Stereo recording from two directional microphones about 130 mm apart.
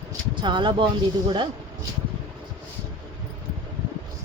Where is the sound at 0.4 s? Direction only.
35° right (ahead or behind).